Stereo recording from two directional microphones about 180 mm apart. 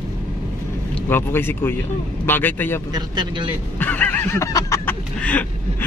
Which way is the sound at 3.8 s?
10° left (ahead or behind).